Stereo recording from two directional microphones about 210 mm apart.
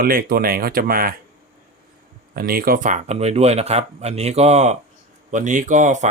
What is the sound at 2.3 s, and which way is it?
Speech, 45° right (ahead or behind).